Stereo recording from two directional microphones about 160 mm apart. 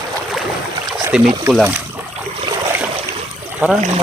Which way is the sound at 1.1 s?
5° right (ahead or behind).